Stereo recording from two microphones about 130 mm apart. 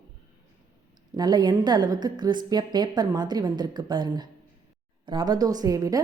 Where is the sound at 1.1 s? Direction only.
35° right (ahead or behind).